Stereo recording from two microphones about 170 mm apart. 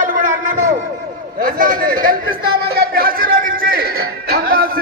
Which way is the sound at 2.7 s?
65° right (ahead or behind).